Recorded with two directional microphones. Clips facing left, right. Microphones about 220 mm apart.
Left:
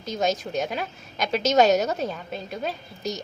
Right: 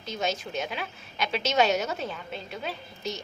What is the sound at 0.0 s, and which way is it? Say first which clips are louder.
A woman's voice: left 5 dB; 40° left (ahead or behind).